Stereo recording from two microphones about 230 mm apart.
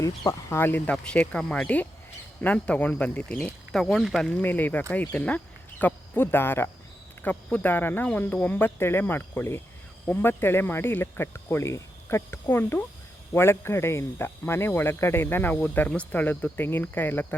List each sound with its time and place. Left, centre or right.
0.0 s speech: centre